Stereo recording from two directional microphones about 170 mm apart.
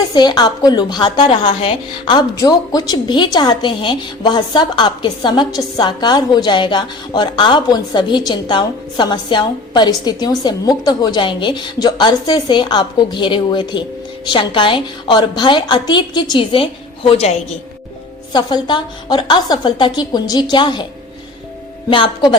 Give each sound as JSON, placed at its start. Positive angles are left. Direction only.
{"t": 0.1, "sound": "a woman's voice", "side_deg": 25}
{"t": 18.3, "sound": "a woman's voice", "side_deg": 25}
{"t": 21.8, "sound": "a woman's voice", "side_deg": 30}